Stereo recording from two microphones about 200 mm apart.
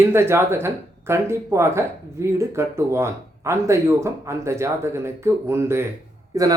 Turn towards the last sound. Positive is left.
turn(degrees=-15)  # may be behind; listen again after turning